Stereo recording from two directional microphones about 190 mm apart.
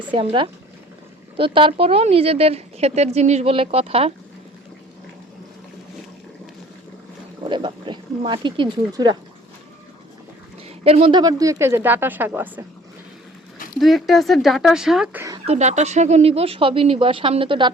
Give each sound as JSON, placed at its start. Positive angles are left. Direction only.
{"t": 0.1, "sound": "speech", "side_deg": -30}
{"t": 7.4, "sound": "a sound", "side_deg": -25}
{"t": 8.9, "sound": "speech", "side_deg": -20}
{"t": 10.8, "sound": "speech", "side_deg": -30}
{"t": 13.7, "sound": "speech", "side_deg": 0}
{"t": 15.4, "sound": "speech", "side_deg": -35}